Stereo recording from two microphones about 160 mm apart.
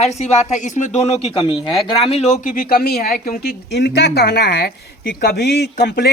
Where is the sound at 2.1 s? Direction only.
40° left (ahead or behind).